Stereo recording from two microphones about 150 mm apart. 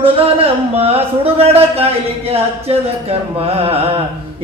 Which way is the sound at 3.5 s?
40° right (ahead or behind).